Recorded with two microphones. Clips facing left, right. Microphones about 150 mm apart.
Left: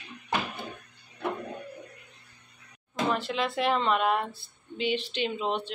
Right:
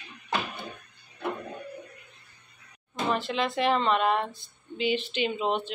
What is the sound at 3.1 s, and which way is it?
Speech, centre (ahead or behind).